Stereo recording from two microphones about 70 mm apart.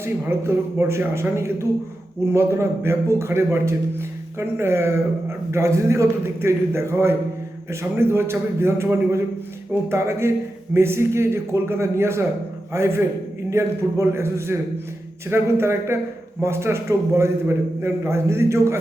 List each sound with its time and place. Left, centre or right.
0.0 s a man's voice: right